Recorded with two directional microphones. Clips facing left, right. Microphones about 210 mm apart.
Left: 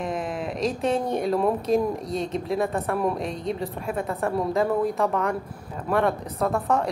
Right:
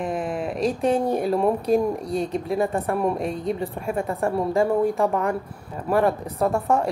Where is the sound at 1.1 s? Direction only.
Centre (ahead or behind).